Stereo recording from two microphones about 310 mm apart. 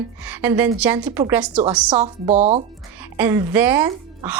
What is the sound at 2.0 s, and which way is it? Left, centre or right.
Speech, right.